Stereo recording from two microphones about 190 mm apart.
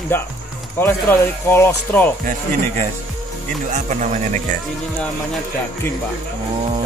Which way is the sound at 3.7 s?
40° right (ahead or behind).